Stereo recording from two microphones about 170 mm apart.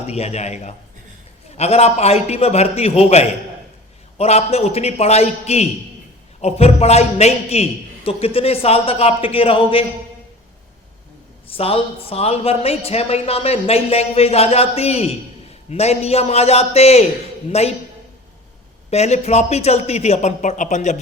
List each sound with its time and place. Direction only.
0.1 s a woman's voice: 40° left (ahead or behind)
11.4 s a woman's voice: 35° left (ahead or behind)
18.9 s a woman's voice: 40° left (ahead or behind)